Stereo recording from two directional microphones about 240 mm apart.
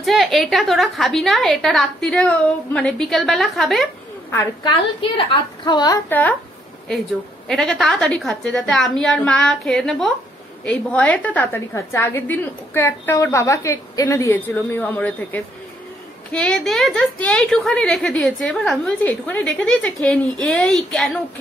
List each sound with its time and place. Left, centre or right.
0.0 s a woman's voice: centre
5.1 s a woman's voice: left
7.4 s a woman's voice: centre